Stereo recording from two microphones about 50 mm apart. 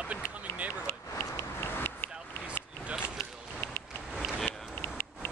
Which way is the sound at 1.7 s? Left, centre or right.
Left.